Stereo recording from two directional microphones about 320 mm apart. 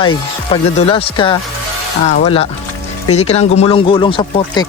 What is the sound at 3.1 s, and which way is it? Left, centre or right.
Speech, centre.